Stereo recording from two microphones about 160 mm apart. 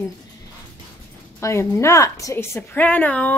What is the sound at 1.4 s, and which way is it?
A woman's voice, 15° left (ahead or behind).